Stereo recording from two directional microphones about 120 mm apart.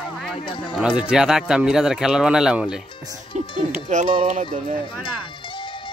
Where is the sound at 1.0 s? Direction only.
5° right (ahead or behind).